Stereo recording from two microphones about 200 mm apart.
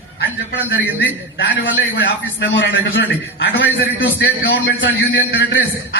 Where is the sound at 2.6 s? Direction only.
65° left (ahead or behind).